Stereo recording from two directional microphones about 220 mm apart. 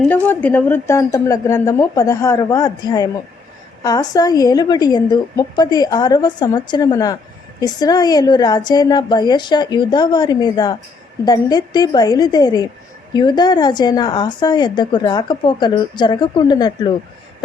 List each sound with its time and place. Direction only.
0.0 s a woman's voice: 5° left (ahead or behind)